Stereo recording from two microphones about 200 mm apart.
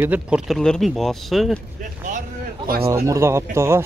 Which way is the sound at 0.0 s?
5° right (ahead or behind).